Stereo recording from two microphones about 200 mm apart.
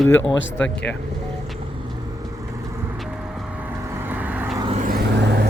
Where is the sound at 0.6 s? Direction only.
5° left (ahead or behind).